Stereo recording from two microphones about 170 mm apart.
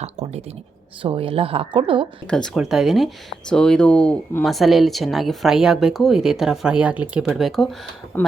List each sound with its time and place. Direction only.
0.0 s speech: 35° right (ahead or behind)
2.2 s speech: 5° left (ahead or behind)